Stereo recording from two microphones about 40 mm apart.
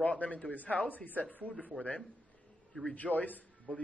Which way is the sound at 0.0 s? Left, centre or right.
Left.